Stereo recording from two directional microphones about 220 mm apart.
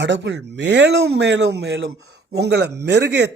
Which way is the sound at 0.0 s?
55° right (ahead or behind).